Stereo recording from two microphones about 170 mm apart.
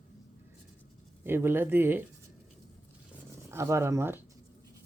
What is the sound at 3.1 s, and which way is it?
Purr, 15° right (ahead or behind).